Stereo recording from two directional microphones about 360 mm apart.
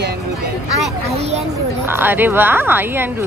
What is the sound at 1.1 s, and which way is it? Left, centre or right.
Speech, centre.